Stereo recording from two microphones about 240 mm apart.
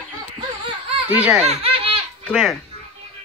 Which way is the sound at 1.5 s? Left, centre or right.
Right.